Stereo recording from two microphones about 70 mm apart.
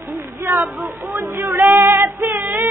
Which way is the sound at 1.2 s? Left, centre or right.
Right.